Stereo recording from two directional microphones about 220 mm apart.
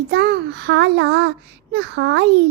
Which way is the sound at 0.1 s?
50° right (ahead or behind).